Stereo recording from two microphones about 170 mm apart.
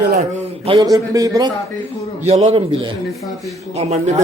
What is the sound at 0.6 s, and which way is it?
Speech, 25° right (ahead or behind).